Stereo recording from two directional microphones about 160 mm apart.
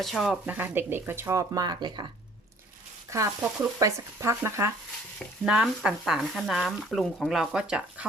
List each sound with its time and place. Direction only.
0.0 s speech: centre (ahead or behind)
0.4 s speech: 10° right (ahead or behind)
3.1 s speech: 20° right (ahead or behind)
5.5 s speech: 5° right (ahead or behind)